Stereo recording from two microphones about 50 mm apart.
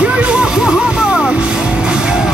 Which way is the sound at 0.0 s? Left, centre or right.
Right.